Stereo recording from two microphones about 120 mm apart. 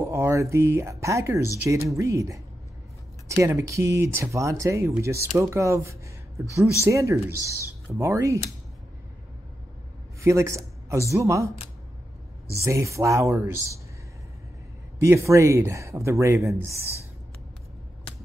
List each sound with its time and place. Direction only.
0.0 s speech: 25° right (ahead or behind)
10.2 s a man's voice: 25° right (ahead or behind)
12.5 s speech: 25° right (ahead or behind)
15.0 s speech: 25° right (ahead or behind)